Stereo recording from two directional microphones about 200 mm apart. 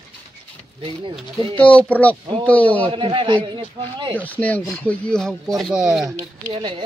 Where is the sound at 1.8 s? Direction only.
5° left (ahead or behind).